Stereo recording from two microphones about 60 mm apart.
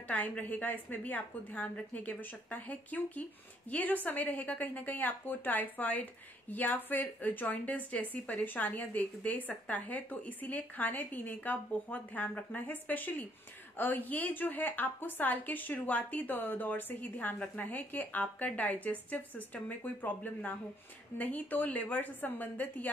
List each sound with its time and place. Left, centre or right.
0.1 s a woman's voice: left